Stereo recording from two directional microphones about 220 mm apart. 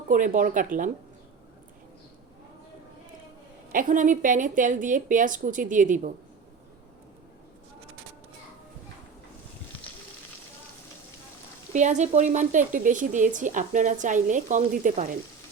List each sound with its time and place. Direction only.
0.1 s speech: 35° right (ahead or behind)
3.7 s speech: 35° right (ahead or behind)
11.7 s speech: 35° right (ahead or behind)